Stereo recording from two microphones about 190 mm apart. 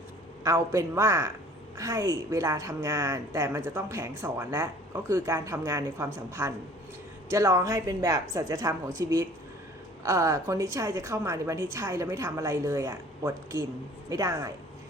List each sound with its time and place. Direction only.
0.4 s a woman's voice: 15° right (ahead or behind)